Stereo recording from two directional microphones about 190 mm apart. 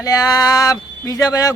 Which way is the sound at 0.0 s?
20° left (ahead or behind).